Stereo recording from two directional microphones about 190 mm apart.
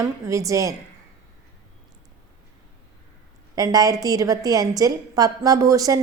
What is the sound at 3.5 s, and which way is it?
A woman's voice, 20° right (ahead or behind).